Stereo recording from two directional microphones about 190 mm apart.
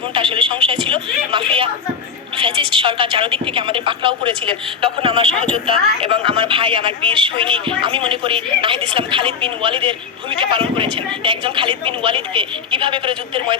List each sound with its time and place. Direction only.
0.1 s speech: 25° right (ahead or behind)